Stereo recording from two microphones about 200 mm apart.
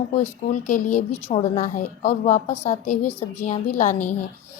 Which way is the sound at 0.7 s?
35° left (ahead or behind).